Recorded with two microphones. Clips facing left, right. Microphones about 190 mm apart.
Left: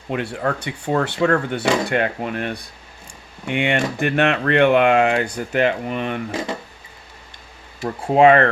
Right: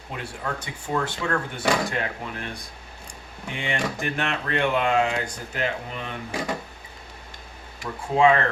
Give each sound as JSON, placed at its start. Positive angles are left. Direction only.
{"t": 0.1, "sound": "speech", "side_deg": 70}
{"t": 8.0, "sound": "speech", "side_deg": 65}